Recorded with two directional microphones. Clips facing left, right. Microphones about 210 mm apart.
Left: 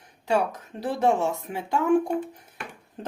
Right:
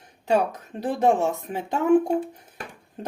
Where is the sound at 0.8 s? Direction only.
20° right (ahead or behind).